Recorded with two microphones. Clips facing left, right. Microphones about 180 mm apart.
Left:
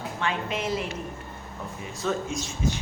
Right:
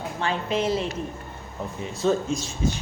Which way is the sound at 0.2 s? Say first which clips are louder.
Right 4 dB; 35° right (ahead or behind).